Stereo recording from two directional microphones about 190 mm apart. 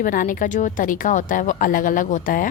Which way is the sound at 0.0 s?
45° left (ahead or behind).